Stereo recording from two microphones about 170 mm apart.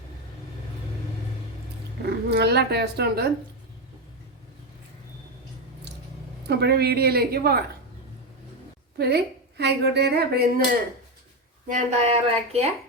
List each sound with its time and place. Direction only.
2.0 s speech: 75° right (ahead or behind)
6.5 s speech: 70° right (ahead or behind)
9.0 s speech: 70° right (ahead or behind)
11.7 s speech: 40° right (ahead or behind)